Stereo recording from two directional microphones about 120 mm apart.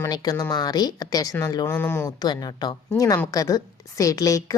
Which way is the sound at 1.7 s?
20° left (ahead or behind).